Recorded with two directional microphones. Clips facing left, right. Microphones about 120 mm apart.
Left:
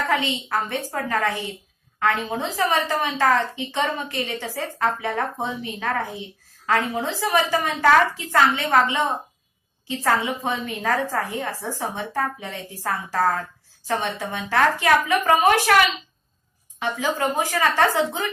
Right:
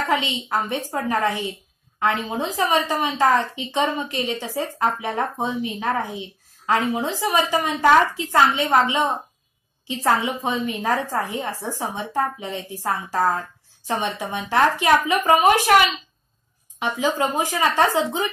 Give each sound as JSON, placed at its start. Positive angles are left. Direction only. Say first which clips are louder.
{"t": 0.0, "sound": "a woman's voice", "louder": "right 1 dB", "side_deg": -15}
{"t": 17.2, "sound": "a woman's voice", "louder": "left 2 dB", "side_deg": -15}